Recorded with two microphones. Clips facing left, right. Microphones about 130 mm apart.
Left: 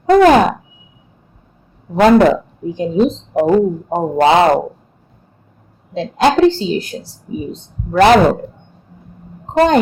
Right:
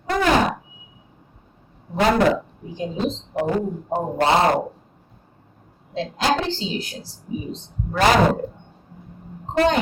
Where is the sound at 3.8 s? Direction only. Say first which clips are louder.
Left 7 dB; 90° left.